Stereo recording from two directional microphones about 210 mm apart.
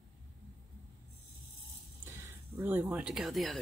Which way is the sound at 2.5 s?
10° right (ahead or behind).